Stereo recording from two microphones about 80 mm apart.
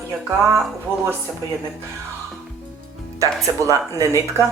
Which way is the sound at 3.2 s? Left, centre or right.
Right.